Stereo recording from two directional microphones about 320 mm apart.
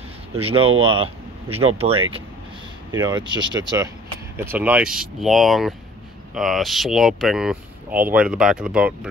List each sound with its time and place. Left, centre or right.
0.3 s speech: centre
2.9 s speech: centre